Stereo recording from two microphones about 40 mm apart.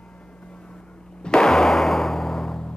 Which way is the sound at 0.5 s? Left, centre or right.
Left.